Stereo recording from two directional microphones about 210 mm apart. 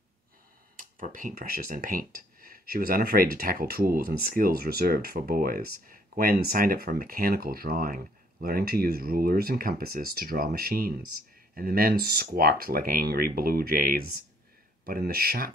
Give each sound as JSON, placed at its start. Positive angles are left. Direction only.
{"t": 0.7, "sound": "speech", "side_deg": -40}